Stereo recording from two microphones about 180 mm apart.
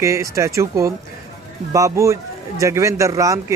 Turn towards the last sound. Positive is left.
turn(degrees=-20)  # may be behind; listen again after turning